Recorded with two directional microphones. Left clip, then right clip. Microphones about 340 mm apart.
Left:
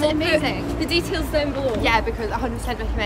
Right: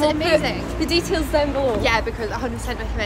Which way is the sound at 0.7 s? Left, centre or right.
Centre.